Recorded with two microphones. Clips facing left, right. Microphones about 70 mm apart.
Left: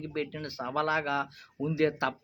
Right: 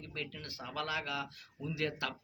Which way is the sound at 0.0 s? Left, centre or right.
Left.